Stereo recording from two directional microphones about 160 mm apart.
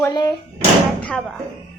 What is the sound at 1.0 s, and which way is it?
Speech, 10° left (ahead or behind).